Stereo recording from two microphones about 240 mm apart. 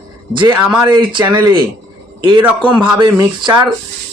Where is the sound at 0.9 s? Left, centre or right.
Centre.